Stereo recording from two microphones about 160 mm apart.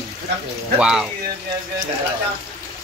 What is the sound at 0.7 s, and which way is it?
Speech, 5° right (ahead or behind).